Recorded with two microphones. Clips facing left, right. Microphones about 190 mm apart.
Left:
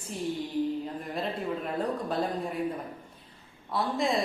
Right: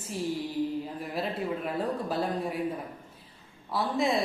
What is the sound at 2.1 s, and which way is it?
Speech, 5° right (ahead or behind).